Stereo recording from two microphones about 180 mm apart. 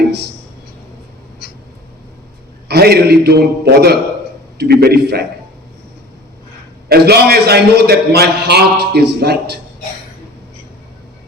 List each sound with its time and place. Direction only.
2.6 s a man's voice: 60° right (ahead or behind)
6.8 s a man's voice: 60° right (ahead or behind)